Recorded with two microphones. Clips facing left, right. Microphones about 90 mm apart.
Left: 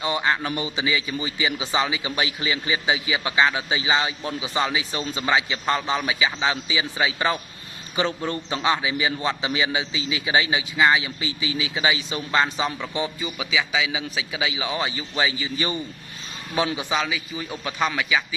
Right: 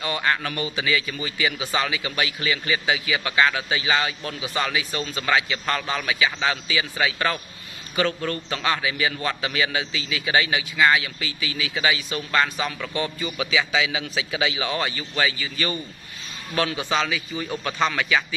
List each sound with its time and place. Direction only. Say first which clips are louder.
0.0 s a man's voice: left 1 dB; 20° left (ahead or behind)